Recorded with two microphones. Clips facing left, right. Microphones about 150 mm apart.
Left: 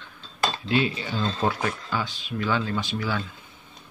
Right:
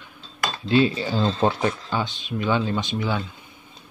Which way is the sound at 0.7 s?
30° right (ahead or behind).